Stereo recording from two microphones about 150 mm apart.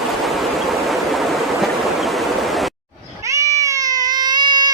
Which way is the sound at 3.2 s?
20° right (ahead or behind).